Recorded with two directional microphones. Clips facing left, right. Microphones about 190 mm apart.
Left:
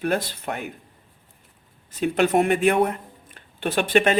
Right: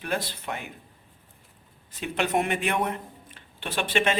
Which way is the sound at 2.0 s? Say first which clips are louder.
Left 7 dB; 45° left (ahead or behind).